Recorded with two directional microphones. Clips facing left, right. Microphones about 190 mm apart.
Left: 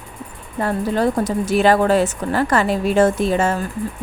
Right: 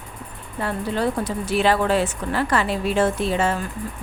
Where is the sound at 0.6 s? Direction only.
45° left (ahead or behind).